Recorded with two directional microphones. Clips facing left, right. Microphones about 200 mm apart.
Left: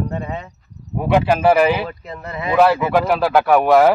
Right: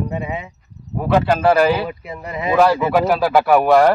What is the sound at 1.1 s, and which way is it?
Speech, 10° left (ahead or behind).